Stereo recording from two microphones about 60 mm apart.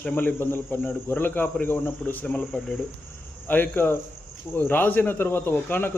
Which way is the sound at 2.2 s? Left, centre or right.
Centre.